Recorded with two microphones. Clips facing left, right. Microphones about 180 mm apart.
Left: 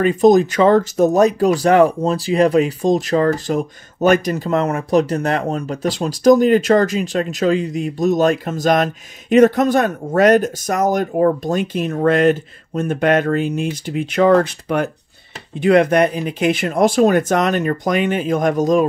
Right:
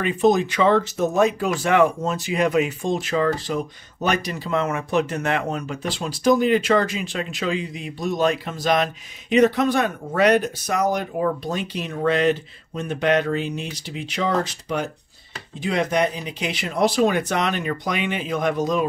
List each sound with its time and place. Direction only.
0.0 s speech: 40° left (ahead or behind)